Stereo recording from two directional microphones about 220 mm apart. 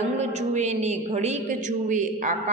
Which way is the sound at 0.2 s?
30° right (ahead or behind).